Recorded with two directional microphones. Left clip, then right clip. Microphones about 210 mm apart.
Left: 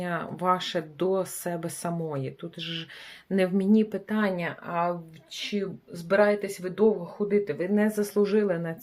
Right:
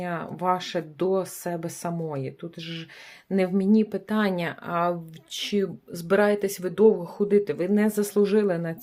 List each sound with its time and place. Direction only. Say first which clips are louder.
0.0 s speech: right 1 dB; 10° right (ahead or behind)
4.1 s speech: right 4 dB; 30° right (ahead or behind); by 6.8 s 45° right (ahead or behind)
7.3 s speech: right 3 dB; 35° right (ahead or behind); by 8.7 s 20° right (ahead or behind)